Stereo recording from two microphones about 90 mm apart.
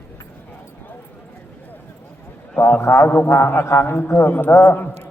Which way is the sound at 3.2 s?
30° left (ahead or behind).